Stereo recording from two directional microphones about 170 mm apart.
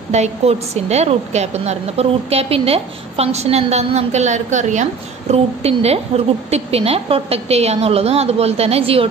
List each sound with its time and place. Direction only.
0.1 s a woman's voice: 40° right (ahead or behind)